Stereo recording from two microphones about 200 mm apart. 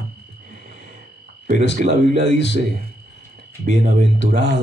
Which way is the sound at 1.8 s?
60° left (ahead or behind).